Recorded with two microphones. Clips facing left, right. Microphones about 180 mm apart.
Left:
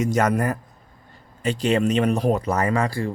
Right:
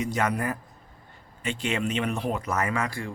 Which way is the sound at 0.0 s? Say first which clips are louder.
Left 6 dB; 45° left (ahead or behind).